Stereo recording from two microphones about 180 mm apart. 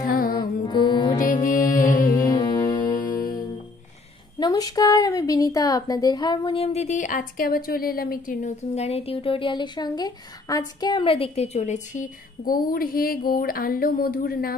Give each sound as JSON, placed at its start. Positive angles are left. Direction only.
{"t": 0.1, "sound": "music", "side_deg": 55}
{"t": 0.7, "sound": "music", "side_deg": 25}
{"t": 1.1, "sound": "music", "side_deg": 50}
{"t": 2.0, "sound": "music", "side_deg": 20}
{"t": 4.4, "sound": "a woman's voice", "side_deg": 20}